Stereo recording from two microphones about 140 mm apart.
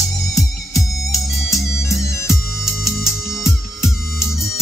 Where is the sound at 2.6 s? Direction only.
5° right (ahead or behind).